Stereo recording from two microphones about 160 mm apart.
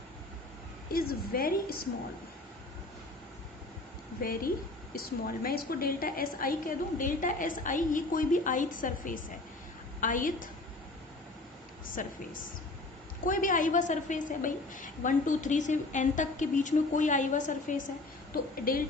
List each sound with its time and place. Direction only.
0.9 s a woman's voice: 65° left (ahead or behind)
4.2 s a woman's voice: 65° left (ahead or behind)
12.0 s a woman's voice: 55° left (ahead or behind)
13.2 s a woman's voice: 55° left (ahead or behind)
18.7 s a woman's voice: 65° left (ahead or behind)